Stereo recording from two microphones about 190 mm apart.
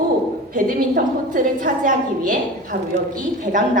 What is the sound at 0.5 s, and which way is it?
A woman's voice, 45° right (ahead or behind).